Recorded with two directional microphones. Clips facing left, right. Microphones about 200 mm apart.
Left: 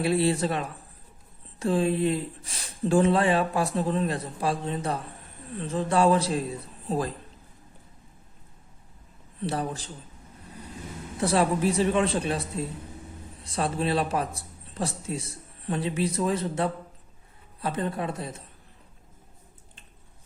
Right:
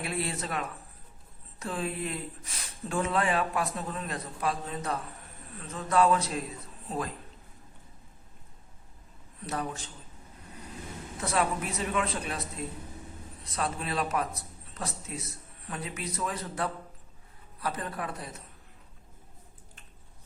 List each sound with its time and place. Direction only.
0.0 s speech: 30° left (ahead or behind)
9.4 s a man's voice: 30° left (ahead or behind)
11.2 s a man's voice: 30° left (ahead or behind)